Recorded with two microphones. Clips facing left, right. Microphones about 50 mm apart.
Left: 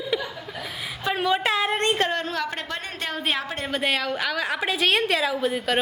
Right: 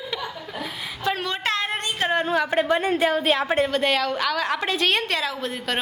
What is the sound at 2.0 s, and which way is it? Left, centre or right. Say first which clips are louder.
A woman's voice: right 4 dB; centre.